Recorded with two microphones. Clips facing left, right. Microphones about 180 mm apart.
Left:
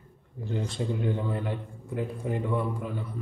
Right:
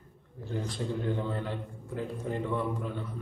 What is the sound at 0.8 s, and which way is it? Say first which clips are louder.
A man's voice: left 2 dB; 15° left (ahead or behind).